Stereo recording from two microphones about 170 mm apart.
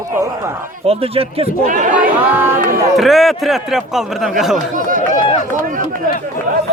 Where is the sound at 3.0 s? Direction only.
Centre (ahead or behind).